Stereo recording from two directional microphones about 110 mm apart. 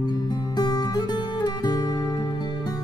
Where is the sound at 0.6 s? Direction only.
40° left (ahead or behind).